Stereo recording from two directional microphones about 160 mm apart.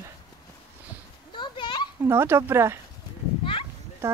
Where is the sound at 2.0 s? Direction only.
15° right (ahead or behind).